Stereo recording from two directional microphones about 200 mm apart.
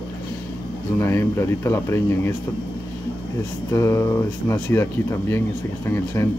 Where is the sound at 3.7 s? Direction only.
15° left (ahead or behind).